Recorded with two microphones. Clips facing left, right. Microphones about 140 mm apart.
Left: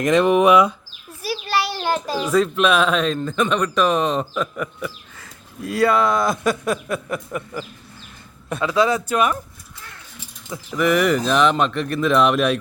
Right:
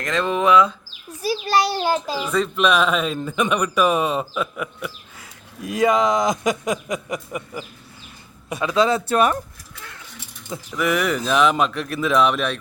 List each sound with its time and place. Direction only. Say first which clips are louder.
0.0 s speech: left 6 dB; 20° left (ahead or behind)
1.5 s child singing: right 3 dB; 35° right (ahead or behind)
2.2 s a man's voice: left 4 dB; 5° left (ahead or behind); by 8.7 s 10° right (ahead or behind)
8.7 s speech: right 1 dB; 25° right (ahead or behind)
10.7 s speech: left 4 dB; centre (ahead or behind)